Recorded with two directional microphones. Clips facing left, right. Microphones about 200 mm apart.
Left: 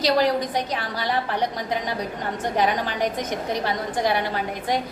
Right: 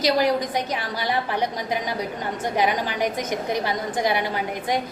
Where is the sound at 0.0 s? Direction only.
15° right (ahead or behind).